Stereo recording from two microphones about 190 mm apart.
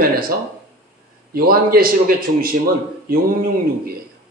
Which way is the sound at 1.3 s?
50° right (ahead or behind).